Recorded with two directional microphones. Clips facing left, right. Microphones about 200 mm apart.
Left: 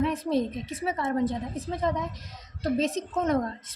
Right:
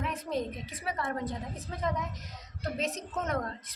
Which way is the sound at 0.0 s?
30° left (ahead or behind).